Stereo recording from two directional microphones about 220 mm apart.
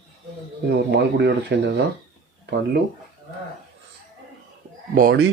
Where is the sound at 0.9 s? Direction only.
45° right (ahead or behind).